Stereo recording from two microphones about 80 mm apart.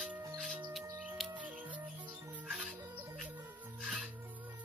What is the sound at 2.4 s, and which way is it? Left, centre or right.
Music, centre.